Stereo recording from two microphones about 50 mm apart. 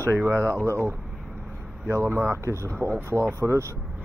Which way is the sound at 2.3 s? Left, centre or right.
Right.